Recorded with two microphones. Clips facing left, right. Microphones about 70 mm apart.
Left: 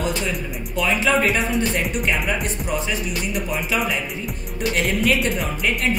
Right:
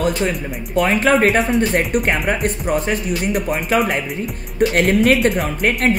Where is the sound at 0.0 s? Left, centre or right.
Right.